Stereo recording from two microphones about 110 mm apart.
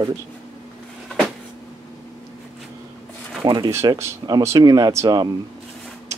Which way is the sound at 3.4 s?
45° right (ahead or behind).